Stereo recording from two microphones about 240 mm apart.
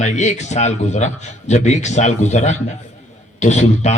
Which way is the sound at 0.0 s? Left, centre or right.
Left.